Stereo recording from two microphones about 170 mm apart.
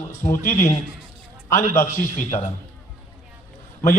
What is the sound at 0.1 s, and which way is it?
A man's voice, 15° left (ahead or behind).